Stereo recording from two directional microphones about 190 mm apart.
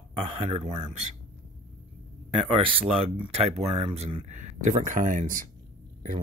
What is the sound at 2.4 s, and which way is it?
Speech, 25° right (ahead or behind).